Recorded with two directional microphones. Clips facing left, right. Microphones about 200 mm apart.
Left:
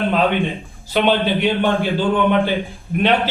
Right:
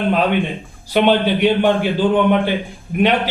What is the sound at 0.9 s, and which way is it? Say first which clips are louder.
A man's voice: right 2 dB; 15° right (ahead or behind).